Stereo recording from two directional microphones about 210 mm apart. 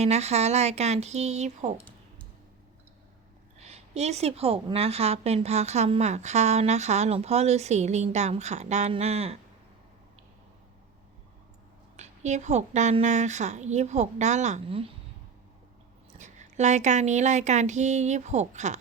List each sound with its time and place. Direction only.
0.0 s a woman's voice: 30° right (ahead or behind)
3.6 s a woman's voice: 30° right (ahead or behind)
11.9 s a woman's voice: 35° right (ahead or behind)
16.1 s a woman's voice: 35° right (ahead or behind)